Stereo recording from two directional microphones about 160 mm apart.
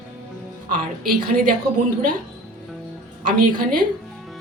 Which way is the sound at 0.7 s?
60° right (ahead or behind).